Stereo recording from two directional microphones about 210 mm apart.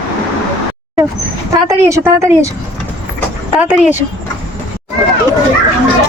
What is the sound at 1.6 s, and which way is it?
Speech, 15° right (ahead or behind).